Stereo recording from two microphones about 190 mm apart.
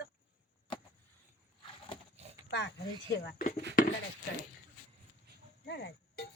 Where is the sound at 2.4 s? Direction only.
65° left (ahead or behind).